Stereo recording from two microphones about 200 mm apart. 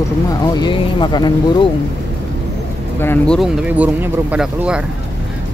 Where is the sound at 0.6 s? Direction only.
25° left (ahead or behind).